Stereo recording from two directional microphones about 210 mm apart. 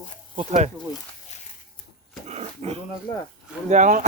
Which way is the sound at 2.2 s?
30° right (ahead or behind).